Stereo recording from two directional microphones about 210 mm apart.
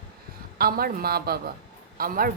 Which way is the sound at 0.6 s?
45° right (ahead or behind).